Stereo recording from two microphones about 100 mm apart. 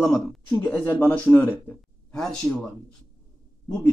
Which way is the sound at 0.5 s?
20° left (ahead or behind).